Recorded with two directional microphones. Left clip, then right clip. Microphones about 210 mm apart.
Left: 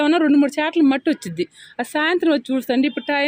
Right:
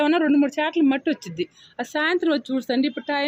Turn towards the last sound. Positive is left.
turn(degrees=30)  # may be behind; listen again after turning